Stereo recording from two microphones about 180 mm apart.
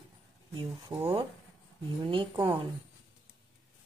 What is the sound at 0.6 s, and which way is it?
Speech, 20° right (ahead or behind).